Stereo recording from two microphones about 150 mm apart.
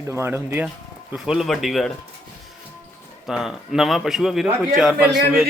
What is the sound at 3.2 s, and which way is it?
Speech, 5° right (ahead or behind).